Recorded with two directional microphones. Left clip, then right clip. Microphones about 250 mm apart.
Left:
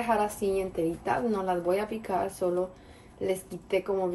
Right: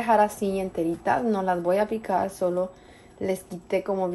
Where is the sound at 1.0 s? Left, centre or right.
Right.